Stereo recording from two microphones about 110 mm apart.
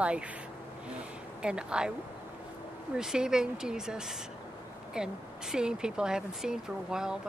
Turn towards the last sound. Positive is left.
turn(degrees=-5)  # may be behind; listen again after turning